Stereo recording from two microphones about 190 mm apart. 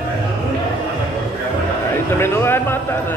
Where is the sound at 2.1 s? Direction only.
10° left (ahead or behind).